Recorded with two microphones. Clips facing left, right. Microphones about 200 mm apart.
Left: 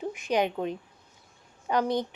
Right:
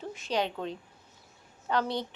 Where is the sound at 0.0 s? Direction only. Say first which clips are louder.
Left 4 dB; 15° left (ahead or behind).